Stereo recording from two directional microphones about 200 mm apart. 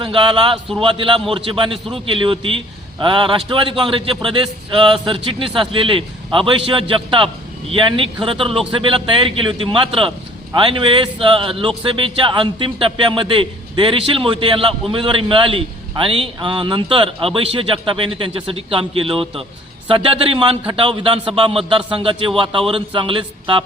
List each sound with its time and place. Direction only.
0.0 s a man's voice: 25° right (ahead or behind)